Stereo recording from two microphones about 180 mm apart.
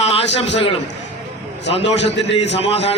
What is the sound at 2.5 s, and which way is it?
Speech, 35° left (ahead or behind).